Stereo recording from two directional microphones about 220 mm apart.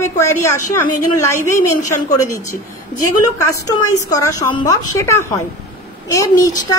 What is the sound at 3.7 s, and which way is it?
A woman's voice, 15° left (ahead or behind).